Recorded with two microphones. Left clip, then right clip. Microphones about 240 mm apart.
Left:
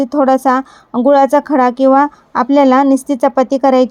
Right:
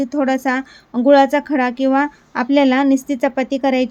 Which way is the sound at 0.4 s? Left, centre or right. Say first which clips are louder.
Left 7 dB; centre.